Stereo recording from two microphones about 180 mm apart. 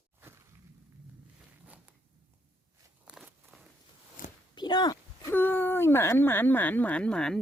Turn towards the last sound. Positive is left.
turn(degrees=5)  # may be behind; listen again after turning